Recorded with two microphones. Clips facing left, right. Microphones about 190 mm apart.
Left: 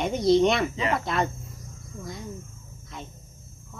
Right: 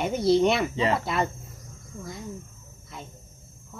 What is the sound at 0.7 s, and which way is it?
Speech, 30° right (ahead or behind).